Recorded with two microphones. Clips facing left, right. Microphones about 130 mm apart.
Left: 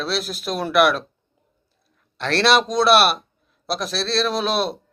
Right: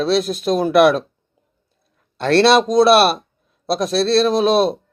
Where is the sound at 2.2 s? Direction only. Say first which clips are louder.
Right 5 dB; 30° right (ahead or behind).